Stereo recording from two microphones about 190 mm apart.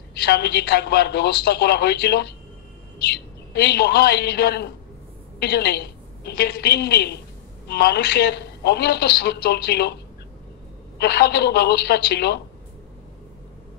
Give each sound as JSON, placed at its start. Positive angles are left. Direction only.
{"t": 0.2, "sound": "a woman's voice", "side_deg": 60}
{"t": 11.0, "sound": "a woman's voice", "side_deg": 60}